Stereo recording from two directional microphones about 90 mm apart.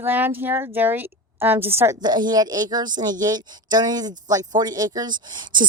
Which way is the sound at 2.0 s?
50° right (ahead or behind).